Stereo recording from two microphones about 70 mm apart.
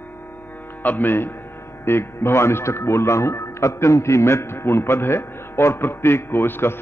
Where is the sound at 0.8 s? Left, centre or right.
Left.